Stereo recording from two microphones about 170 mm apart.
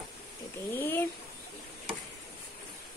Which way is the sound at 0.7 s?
10° left (ahead or behind).